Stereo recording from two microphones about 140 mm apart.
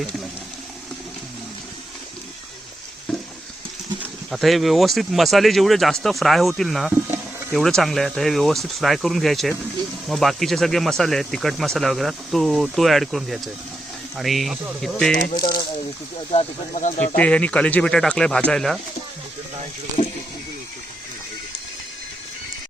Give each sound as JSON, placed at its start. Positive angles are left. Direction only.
{"t": 4.3, "sound": "speech", "side_deg": 0}
{"t": 15.4, "sound": "speech", "side_deg": 30}
{"t": 16.3, "sound": "speech", "side_deg": 50}
{"t": 17.2, "sound": "speech", "side_deg": 10}